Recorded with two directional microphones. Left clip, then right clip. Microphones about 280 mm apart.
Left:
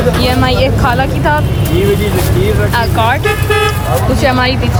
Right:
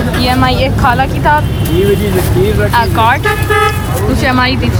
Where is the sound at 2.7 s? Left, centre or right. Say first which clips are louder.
Right 4 dB; centre.